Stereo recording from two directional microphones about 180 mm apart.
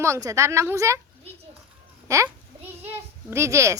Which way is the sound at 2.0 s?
15° right (ahead or behind).